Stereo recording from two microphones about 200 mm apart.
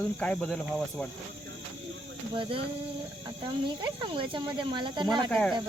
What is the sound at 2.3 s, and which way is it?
Speech, 25° right (ahead or behind).